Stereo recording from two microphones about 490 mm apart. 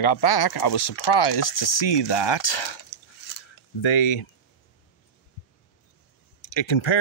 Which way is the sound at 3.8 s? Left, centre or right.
Left.